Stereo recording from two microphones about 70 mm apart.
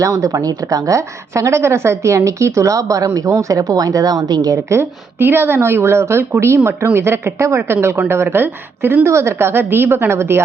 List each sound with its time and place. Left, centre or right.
0.0 s a woman's voice: right
0.3 s a woman's voice: right
4.5 s speech: right